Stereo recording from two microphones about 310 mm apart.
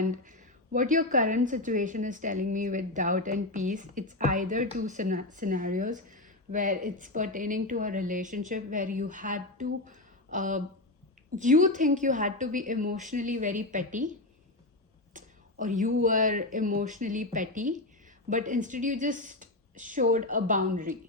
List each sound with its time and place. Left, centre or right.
0.0 s speech: right
15.1 s speech: right